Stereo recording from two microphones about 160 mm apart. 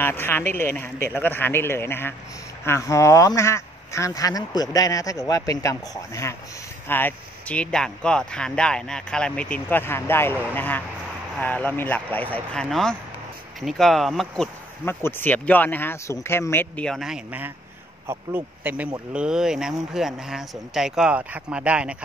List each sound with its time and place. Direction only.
0.0 s speech: 15° left (ahead or behind)
14.9 s speech: 15° left (ahead or behind); by 21.9 s 5° right (ahead or behind)